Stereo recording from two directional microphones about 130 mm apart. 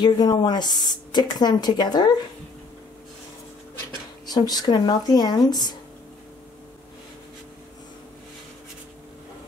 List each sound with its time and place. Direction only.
0.0 s speech: 35° left (ahead or behind)
4.3 s speech: 30° left (ahead or behind)